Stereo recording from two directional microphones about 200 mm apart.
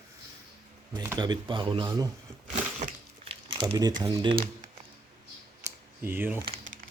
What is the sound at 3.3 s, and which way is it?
Crumpling, 25° right (ahead or behind).